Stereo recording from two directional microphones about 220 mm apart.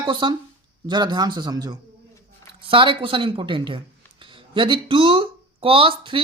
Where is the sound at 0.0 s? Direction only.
20° right (ahead or behind).